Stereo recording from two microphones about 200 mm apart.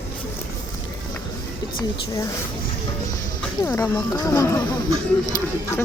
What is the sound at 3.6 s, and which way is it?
Speech, 10° left (ahead or behind).